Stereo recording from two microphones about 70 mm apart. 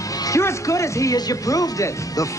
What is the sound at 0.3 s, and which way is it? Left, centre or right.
Speech, left.